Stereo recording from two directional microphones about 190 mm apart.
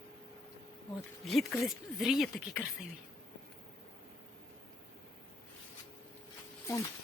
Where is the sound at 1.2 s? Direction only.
Centre (ahead or behind).